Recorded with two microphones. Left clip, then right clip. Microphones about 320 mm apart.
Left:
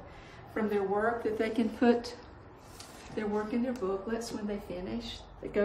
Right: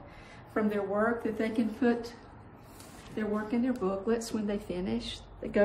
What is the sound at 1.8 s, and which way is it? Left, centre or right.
Speech, centre.